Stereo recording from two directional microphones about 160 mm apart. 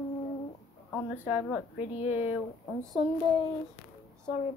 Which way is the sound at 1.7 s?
45° left (ahead or behind).